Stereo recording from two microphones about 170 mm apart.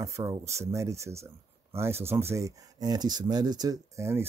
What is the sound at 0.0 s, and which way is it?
Speech, 20° right (ahead or behind).